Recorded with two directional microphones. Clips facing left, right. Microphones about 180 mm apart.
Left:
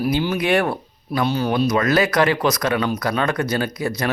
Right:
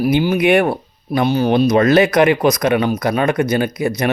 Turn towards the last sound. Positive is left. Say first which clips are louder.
# right 5 dB
turn(degrees=-20)  # may be behind; listen again after turning